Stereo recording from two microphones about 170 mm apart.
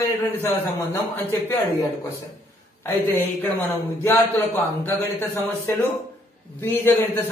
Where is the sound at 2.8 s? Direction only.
15° left (ahead or behind).